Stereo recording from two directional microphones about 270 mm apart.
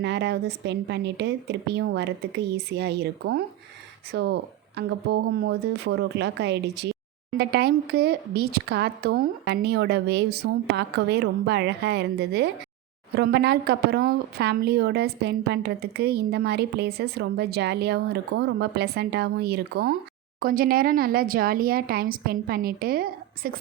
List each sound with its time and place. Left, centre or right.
0.0 s a woman's voice: right